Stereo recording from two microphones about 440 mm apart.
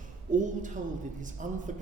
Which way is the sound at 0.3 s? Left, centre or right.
Centre.